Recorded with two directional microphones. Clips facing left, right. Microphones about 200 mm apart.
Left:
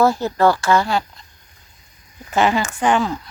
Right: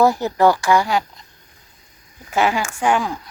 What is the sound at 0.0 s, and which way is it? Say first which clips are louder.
Speech: right 1 dB; 15° right (ahead or behind).